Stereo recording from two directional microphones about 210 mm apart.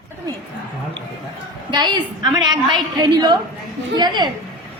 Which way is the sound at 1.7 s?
20° right (ahead or behind).